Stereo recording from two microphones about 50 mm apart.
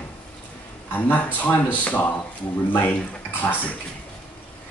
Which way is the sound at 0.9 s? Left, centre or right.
Left.